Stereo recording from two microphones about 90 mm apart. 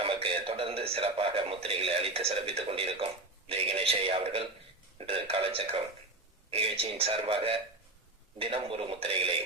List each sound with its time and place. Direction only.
0.0 s a man's voice: 90° right